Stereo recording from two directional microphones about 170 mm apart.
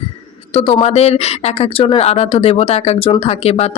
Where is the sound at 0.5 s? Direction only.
35° left (ahead or behind).